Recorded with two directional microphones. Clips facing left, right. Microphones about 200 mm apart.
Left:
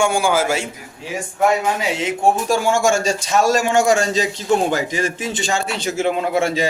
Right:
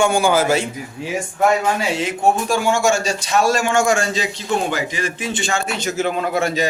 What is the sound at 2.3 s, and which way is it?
A man's voice, 45° left (ahead or behind).